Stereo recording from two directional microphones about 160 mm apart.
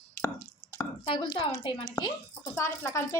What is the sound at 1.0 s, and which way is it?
Speech, 35° left (ahead or behind).